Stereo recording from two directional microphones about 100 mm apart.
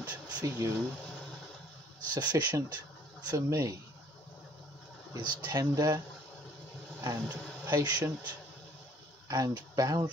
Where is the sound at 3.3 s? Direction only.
30° right (ahead or behind).